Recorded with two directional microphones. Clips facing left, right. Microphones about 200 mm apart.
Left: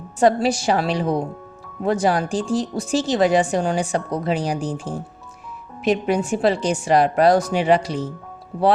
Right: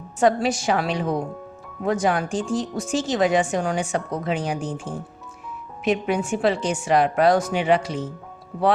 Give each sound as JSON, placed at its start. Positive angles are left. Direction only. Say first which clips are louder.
{"t": 0.2, "sound": "speech", "louder": "left 2 dB", "side_deg": 35}